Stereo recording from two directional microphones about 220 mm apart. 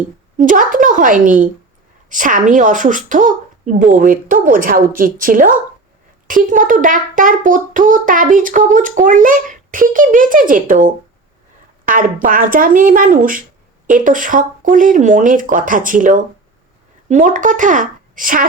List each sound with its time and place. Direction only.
0.3 s a child's voice: 35° right (ahead or behind)